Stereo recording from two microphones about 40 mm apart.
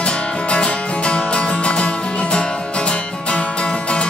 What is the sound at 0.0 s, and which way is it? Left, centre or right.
Music, left.